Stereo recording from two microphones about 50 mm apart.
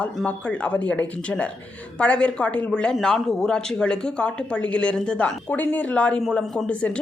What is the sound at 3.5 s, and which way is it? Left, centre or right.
Speech, centre.